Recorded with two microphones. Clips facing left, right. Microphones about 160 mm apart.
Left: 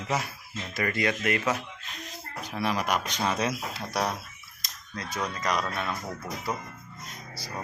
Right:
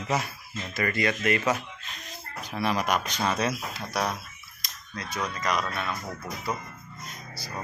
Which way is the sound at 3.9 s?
30° left (ahead or behind).